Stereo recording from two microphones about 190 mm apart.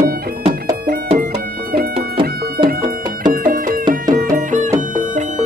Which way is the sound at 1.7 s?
55° right (ahead or behind).